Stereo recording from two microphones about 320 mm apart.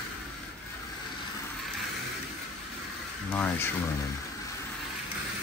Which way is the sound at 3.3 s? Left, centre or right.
Centre.